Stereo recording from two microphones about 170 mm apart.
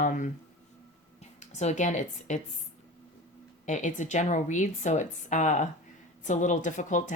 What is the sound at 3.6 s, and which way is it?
Speech, 45° left (ahead or behind).